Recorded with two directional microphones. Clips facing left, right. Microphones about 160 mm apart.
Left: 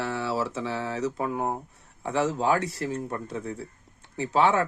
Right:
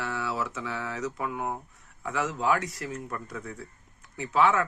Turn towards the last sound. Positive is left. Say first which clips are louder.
# left 2 dB
turn(degrees=30)  # may be behind; listen again after turning